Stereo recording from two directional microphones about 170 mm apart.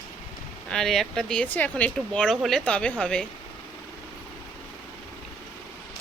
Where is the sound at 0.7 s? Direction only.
Centre (ahead or behind).